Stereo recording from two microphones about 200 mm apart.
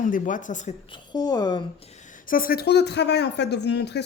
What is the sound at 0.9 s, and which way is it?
Speech, 20° left (ahead or behind).